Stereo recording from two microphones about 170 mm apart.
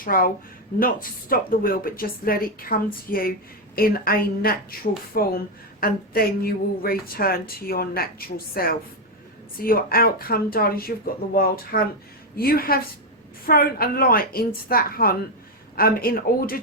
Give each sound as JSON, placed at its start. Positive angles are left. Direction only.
{"t": 0.0, "sound": "a woman's voice", "side_deg": 55}